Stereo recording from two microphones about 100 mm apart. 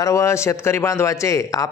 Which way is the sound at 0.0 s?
30° left (ahead or behind).